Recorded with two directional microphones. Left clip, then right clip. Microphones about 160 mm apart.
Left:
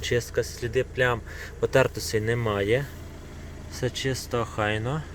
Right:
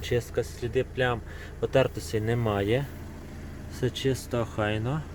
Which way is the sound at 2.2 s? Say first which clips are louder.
Left 1 dB; 5° right (ahead or behind).